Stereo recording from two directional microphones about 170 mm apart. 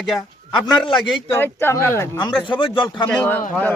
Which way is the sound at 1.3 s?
15° left (ahead or behind).